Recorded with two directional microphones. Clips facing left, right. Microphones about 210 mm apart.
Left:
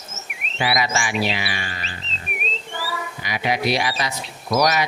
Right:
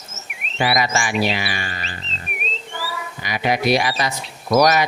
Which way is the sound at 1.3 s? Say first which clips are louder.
Right 2 dB; 50° right (ahead or behind).